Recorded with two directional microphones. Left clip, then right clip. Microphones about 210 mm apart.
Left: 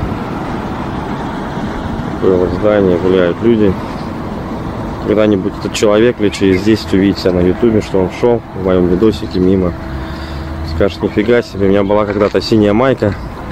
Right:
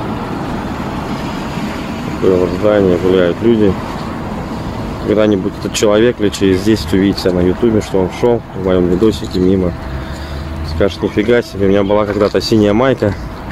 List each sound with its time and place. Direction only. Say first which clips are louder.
2.6 s speech: even; 5° right (ahead or behind)
5.0 s speech: left 1 dB; centre (ahead or behind)
10.8 s speech: left 1 dB; centre (ahead or behind)